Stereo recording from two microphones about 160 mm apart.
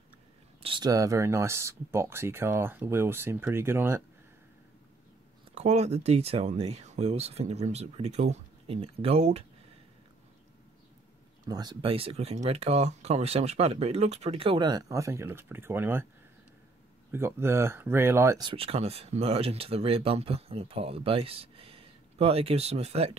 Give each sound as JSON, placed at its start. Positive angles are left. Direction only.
{"t": 0.6, "sound": "speech", "side_deg": -30}
{"t": 5.5, "sound": "speech", "side_deg": -45}
{"t": 11.4, "sound": "speech", "side_deg": -25}
{"t": 17.1, "sound": "speech", "side_deg": -15}
{"t": 18.5, "sound": "speech", "side_deg": -35}